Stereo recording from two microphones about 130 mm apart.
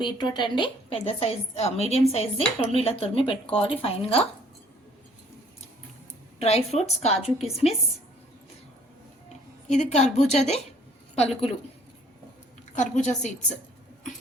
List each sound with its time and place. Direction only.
0.0 s speech: 35° left (ahead or behind)
6.4 s speech: 55° left (ahead or behind)
9.6 s a woman's voice: 65° left (ahead or behind)
12.7 s a woman's voice: 65° left (ahead or behind)